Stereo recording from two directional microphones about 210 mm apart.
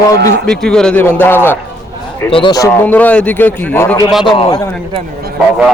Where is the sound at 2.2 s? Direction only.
25° left (ahead or behind).